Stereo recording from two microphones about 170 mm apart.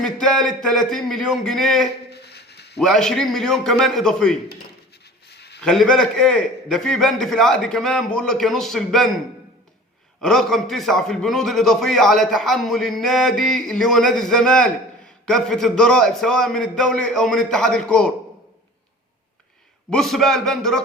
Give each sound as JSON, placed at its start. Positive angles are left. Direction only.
{"t": 0.0, "sound": "a man's voice", "side_deg": 5}
{"t": 2.0, "sound": "a sound", "side_deg": 75}
{"t": 2.7, "sound": "a man's voice", "side_deg": 5}
{"t": 5.3, "sound": "a sound", "side_deg": 75}
{"t": 5.6, "sound": "a man's voice", "side_deg": 5}
{"t": 19.9, "sound": "a man's voice", "side_deg": 0}